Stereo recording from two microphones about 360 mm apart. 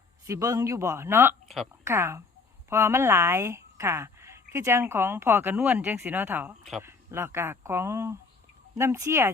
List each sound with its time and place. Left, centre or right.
0.3 s speech: centre